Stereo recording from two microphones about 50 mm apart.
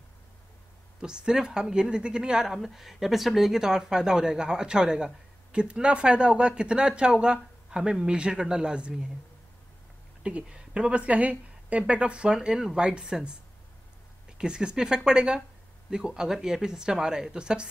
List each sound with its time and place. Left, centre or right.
1.0 s speech: centre
2.4 s speech: centre
10.2 s speech: centre
14.4 s speech: centre